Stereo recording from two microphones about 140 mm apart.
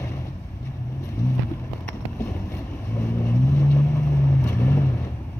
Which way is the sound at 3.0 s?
20° left (ahead or behind).